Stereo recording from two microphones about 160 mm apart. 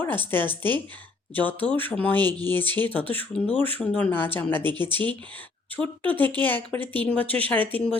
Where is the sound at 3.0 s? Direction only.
35° right (ahead or behind).